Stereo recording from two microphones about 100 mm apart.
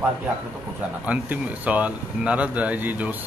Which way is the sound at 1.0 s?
15° right (ahead or behind).